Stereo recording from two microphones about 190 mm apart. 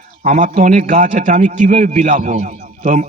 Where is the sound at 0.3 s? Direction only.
45° right (ahead or behind).